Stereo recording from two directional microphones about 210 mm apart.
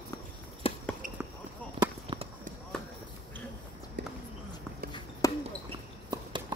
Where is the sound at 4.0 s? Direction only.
55° right (ahead or behind).